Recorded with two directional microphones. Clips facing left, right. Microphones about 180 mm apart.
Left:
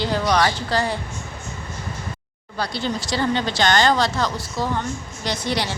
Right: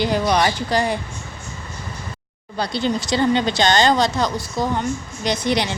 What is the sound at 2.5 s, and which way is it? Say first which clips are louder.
Speech: right 4 dB; 20° right (ahead or behind).